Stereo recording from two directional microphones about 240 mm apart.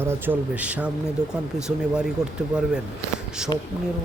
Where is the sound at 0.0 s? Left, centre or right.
Centre.